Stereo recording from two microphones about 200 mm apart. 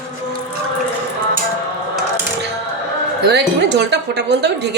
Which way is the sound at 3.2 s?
60° right (ahead or behind).